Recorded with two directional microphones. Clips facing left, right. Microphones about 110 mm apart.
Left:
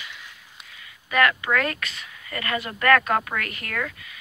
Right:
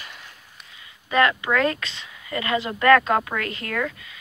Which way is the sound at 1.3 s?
20° right (ahead or behind).